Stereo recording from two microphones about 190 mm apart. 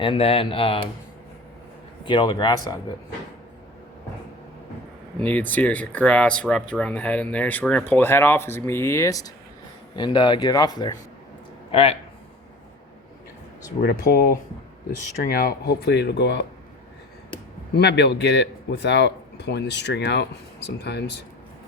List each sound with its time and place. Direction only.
0.0 s speech: 30° left (ahead or behind)
2.0 s speech: 25° left (ahead or behind)
5.2 s speech: 10° left (ahead or behind); by 11.9 s 30° left (ahead or behind)
13.8 s speech: 55° left (ahead or behind)
17.7 s speech: 60° left (ahead or behind)